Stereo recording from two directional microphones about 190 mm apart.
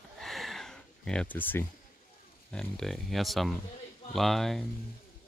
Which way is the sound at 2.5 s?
Centre (ahead or behind).